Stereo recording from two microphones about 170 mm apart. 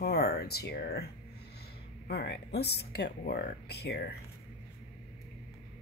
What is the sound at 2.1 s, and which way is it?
A woman's voice, 75° left (ahead or behind).